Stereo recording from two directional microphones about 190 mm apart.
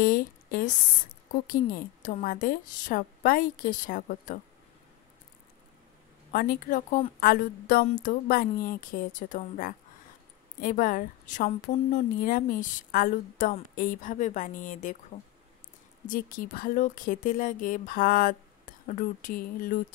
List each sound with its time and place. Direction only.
0.0 s a sound: 50° left (ahead or behind)
1.5 s a woman's voice: 50° left (ahead or behind)
6.3 s a woman's voice: 50° left (ahead or behind)
16.1 s a woman's voice: 45° left (ahead or behind)